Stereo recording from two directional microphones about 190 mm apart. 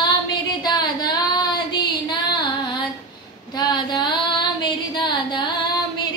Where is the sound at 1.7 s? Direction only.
20° left (ahead or behind).